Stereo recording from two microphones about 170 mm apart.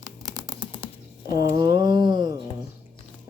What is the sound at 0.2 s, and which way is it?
Typing, 25° right (ahead or behind).